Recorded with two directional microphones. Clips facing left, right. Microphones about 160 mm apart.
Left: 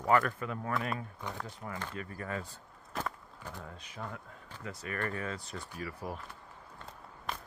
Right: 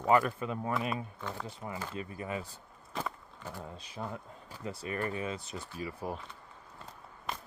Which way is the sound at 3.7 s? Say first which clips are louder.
Right 3 dB; 30° right (ahead or behind).